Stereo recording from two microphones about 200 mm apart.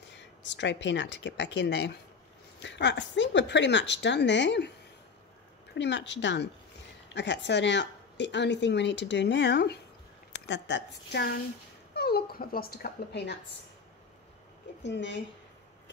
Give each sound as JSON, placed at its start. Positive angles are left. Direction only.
{"t": 0.1, "sound": "a woman's voice", "side_deg": 60}
{"t": 5.8, "sound": "a woman's voice", "side_deg": 65}
{"t": 14.8, "sound": "a woman's voice", "side_deg": 60}